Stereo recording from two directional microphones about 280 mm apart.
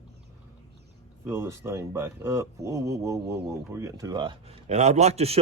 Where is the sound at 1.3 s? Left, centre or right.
Centre.